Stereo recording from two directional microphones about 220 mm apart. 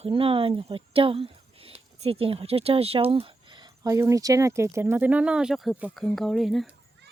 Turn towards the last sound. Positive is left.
turn(degrees=0)  # may be behind; listen again after turning